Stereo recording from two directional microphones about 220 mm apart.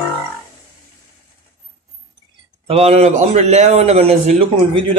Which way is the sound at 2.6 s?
25° right (ahead or behind).